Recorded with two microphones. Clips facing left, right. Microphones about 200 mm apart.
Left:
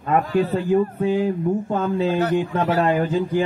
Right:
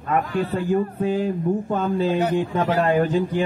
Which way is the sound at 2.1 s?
15° right (ahead or behind).